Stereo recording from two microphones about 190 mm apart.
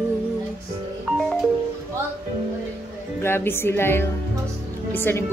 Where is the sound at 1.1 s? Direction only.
Centre (ahead or behind).